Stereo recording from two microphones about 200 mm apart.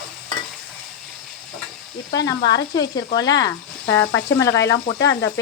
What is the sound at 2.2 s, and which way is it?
Speech, 20° left (ahead or behind).